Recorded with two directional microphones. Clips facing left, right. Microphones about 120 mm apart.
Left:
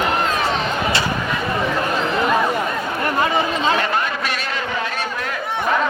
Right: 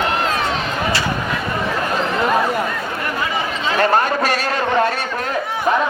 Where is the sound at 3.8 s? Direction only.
40° right (ahead or behind).